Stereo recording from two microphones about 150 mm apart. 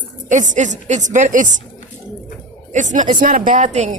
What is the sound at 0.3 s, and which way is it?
A woman's voice, 55° right (ahead or behind).